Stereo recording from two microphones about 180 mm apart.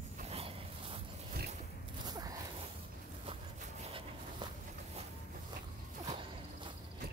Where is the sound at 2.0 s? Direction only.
20° right (ahead or behind).